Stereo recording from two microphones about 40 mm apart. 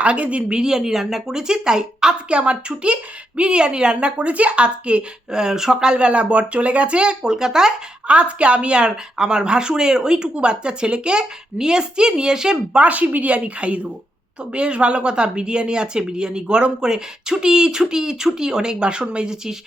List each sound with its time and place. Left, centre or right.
0.0 s speech: right
0.4 s speech: centre
5.4 s speech: centre
5.9 s speech: right
8.0 s speech: right
12.8 s speech: right; by 19.5 s centre